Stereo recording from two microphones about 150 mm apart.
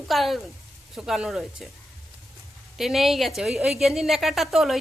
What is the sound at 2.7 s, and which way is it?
A woman's voice, centre (ahead or behind).